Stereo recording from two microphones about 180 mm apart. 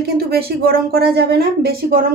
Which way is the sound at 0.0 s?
60° right (ahead or behind).